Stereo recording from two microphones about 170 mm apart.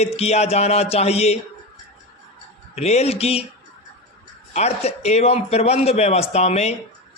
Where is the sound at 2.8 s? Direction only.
40° left (ahead or behind).